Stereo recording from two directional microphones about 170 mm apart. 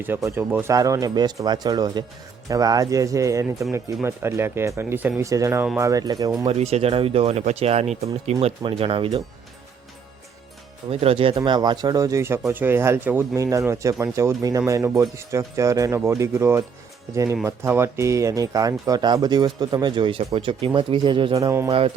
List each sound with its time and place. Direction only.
0.0 s speech: 15° right (ahead or behind)
6.5 s speech: 40° right (ahead or behind)
11.0 s speech: 35° right (ahead or behind); by 21.7 s 15° right (ahead or behind)
21.7 s speech: 30° right (ahead or behind)